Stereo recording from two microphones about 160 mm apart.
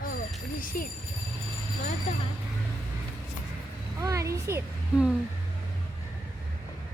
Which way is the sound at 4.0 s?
20° right (ahead or behind).